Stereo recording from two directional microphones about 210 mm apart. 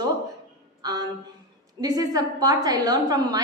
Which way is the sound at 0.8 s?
20° right (ahead or behind).